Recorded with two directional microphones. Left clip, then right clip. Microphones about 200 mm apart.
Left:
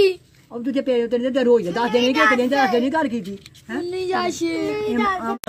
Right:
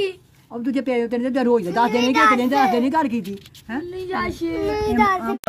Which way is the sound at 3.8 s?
55° left (ahead or behind).